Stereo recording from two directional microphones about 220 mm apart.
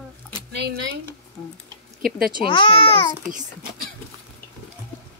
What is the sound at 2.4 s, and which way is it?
Speech, 20° left (ahead or behind).